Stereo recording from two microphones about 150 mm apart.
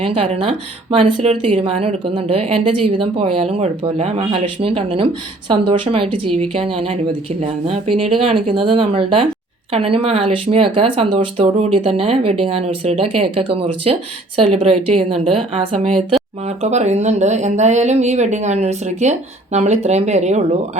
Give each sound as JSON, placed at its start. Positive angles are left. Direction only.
{"t": 0.0, "sound": "speech", "side_deg": -35}
{"t": 16.6, "sound": "speech", "side_deg": -50}